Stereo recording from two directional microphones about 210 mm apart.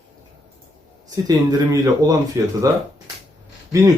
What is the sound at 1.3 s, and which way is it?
Speech, 15° right (ahead or behind).